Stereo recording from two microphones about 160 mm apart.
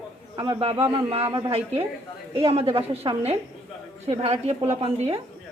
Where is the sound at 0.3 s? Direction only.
35° right (ahead or behind).